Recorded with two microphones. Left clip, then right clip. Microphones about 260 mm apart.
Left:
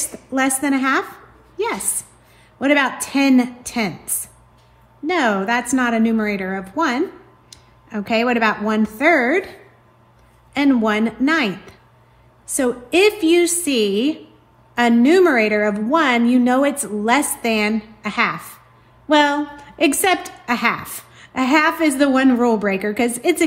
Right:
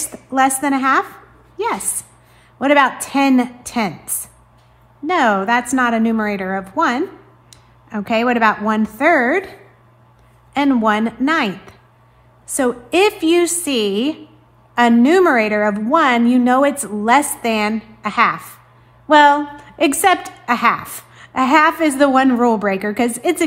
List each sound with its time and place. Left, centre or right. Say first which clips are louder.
0.1 s a woman's voice: right 6 dB; centre
2.6 s a woman's voice: right 4 dB; centre